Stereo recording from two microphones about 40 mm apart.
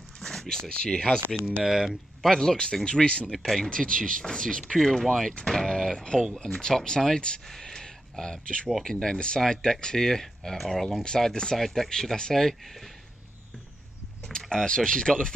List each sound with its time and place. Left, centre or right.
0.2 s a sound: centre
0.7 s speech: left
1.6 s speech: centre
2.2 s speech: centre
2.5 s speech: left
3.4 s speech: centre
7.4 s a sound: centre
8.8 s speech: centre
14.3 s speech: centre